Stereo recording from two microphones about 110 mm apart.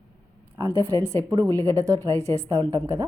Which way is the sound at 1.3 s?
40° right (ahead or behind).